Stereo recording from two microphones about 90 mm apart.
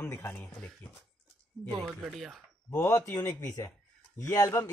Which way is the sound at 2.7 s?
35° left (ahead or behind).